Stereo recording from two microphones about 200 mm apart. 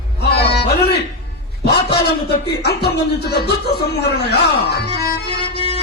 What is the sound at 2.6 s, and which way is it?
A man's voice, 55° left (ahead or behind).